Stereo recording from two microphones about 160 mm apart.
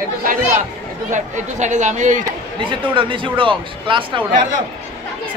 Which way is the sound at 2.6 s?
30° right (ahead or behind).